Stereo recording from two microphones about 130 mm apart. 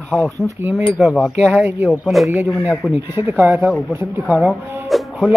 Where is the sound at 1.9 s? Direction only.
Centre (ahead or behind).